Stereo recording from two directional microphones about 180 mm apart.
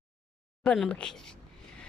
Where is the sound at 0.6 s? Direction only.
5° left (ahead or behind).